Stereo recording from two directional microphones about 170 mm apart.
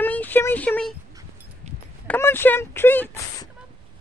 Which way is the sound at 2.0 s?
15° left (ahead or behind).